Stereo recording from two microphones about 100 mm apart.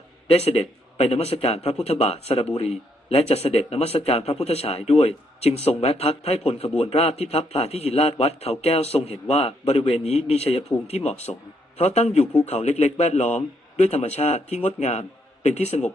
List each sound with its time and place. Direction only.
0.3 s a man's voice: 90° left